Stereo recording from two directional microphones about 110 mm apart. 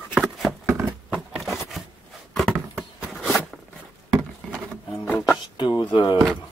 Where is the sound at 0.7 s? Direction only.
20° right (ahead or behind).